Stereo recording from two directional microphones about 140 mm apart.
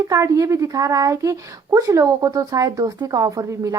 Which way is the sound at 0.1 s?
25° right (ahead or behind).